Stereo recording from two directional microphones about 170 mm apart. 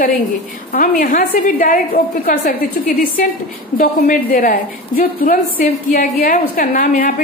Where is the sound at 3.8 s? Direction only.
55° left (ahead or behind).